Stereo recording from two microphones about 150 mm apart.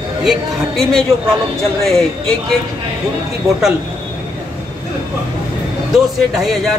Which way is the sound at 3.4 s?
20° right (ahead or behind).